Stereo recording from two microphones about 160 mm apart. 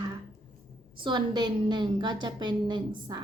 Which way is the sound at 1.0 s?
30° right (ahead or behind).